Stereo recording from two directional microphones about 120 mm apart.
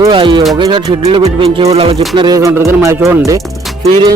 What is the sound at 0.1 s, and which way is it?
Speech, 40° right (ahead or behind).